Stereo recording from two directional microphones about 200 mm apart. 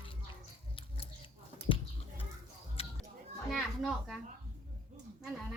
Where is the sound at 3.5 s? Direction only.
Centre (ahead or behind).